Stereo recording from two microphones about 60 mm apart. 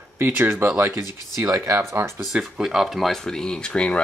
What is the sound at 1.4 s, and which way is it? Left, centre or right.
Speech, right.